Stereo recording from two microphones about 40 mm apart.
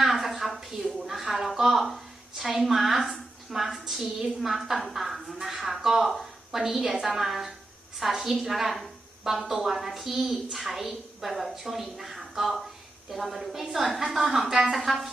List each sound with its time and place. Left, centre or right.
0.0 s a woman's voice: centre
14.4 s speech: centre
14.7 s a woman's voice: centre